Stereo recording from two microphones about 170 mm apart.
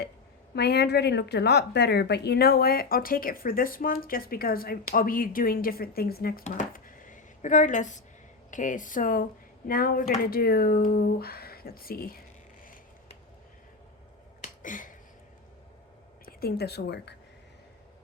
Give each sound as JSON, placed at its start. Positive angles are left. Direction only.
{"t": 0.5, "sound": "speech", "side_deg": 75}
{"t": 6.4, "sound": "speech", "side_deg": 50}
{"t": 14.4, "sound": "finger snapping", "side_deg": 50}
{"t": 16.2, "sound": "a woman's voice", "side_deg": 65}